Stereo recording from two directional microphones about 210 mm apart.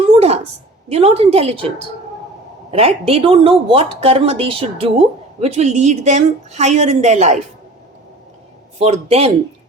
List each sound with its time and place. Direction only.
0.1 s a sound: 30° right (ahead or behind)
0.9 s a woman's voice: 30° right (ahead or behind)
2.7 s a woman's voice: 30° right (ahead or behind)
8.8 s a woman's voice: 30° right (ahead or behind)